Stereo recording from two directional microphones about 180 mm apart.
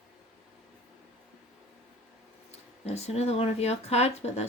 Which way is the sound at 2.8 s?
35° left (ahead or behind).